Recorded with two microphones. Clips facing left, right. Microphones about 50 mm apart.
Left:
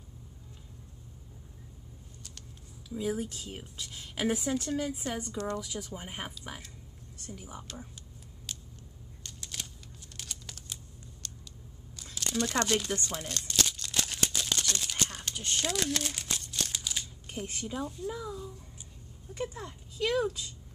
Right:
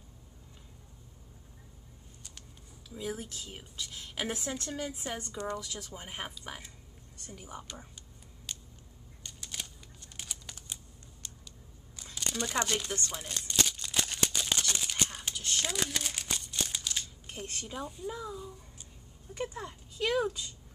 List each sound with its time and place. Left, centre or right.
2.9 s a woman's voice: centre
5.6 s a woman's voice: centre
8.5 s a sound: centre
10.1 s computer keyboard: centre
11.2 s a sound: centre
12.0 s crumpling: centre
15.5 s speech: centre